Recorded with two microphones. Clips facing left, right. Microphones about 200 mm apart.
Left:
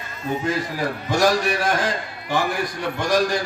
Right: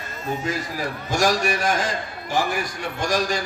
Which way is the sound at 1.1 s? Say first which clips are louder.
Left 2 dB; 60° left (ahead or behind).